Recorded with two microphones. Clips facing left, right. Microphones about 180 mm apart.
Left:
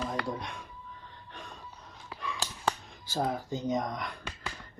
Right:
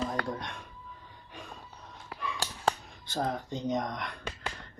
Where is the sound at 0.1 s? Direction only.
Centre (ahead or behind).